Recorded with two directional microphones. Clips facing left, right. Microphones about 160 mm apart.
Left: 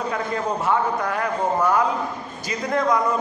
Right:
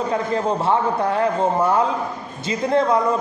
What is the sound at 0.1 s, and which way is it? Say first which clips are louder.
A man's voice: right 4 dB; 30° right (ahead or behind).